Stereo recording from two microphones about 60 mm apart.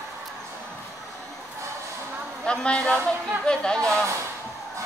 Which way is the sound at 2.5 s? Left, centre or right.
Centre.